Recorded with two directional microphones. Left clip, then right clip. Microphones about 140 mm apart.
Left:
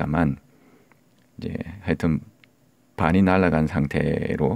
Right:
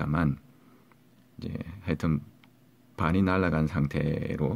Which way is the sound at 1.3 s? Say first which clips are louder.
Left 7 dB; 40° left (ahead or behind).